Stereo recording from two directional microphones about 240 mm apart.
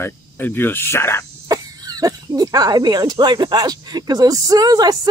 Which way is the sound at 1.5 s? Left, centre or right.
Centre.